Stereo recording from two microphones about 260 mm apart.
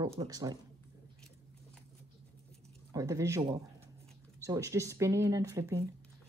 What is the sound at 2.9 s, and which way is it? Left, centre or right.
Speech, centre.